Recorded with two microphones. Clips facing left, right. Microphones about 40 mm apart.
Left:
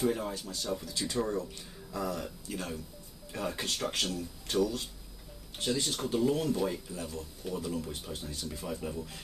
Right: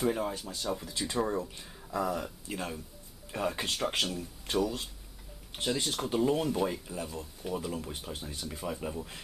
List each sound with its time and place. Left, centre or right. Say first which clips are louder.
0.0 s speech: right 1 dB; centre
0.8 s speech: right 1 dB; right